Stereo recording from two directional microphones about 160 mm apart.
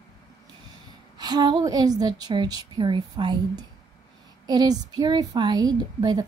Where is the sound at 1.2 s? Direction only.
25° right (ahead or behind).